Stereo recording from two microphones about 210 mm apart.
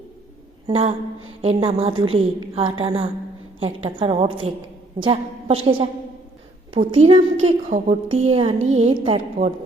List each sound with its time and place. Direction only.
0.7 s a woman's voice: 30° right (ahead or behind)